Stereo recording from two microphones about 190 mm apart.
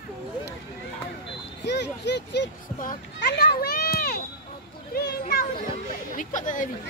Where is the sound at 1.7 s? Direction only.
65° left (ahead or behind).